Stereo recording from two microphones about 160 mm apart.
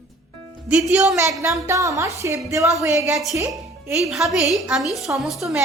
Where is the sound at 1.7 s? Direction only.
20° right (ahead or behind).